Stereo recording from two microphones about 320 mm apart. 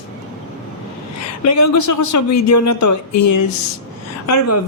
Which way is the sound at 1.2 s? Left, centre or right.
Left.